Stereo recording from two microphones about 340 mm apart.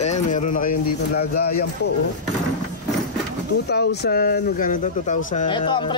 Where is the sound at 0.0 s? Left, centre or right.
Centre.